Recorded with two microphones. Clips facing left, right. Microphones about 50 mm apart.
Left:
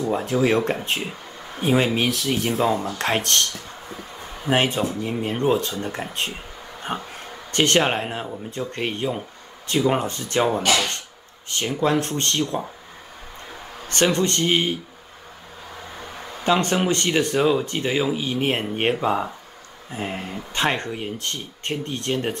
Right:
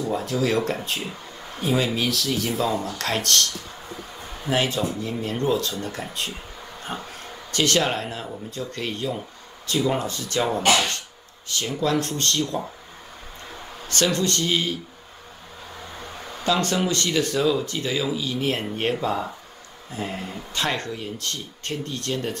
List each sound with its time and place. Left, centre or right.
0.0 s speech: left
4.5 s speech: left
6.1 s a sound: left
7.5 s speech: left
10.6 s speech: right
11.4 s speech: left
13.8 s speech: left
16.4 s speech: left